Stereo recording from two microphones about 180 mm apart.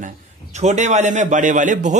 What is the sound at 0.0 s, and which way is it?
A man's voice, 40° right (ahead or behind).